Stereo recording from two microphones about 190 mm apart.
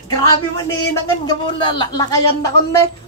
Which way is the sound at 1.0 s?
25° left (ahead or behind).